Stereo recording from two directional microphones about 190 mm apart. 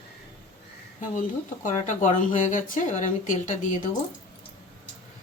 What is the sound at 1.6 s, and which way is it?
Speech, 40° left (ahead or behind).